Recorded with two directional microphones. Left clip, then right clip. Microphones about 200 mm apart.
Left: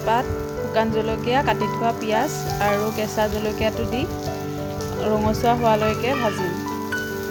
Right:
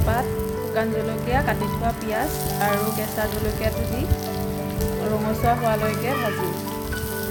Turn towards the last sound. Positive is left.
turn(degrees=35)  # may be behind; listen again after turning